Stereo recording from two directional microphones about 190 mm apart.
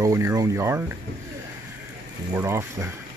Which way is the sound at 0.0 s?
15° right (ahead or behind).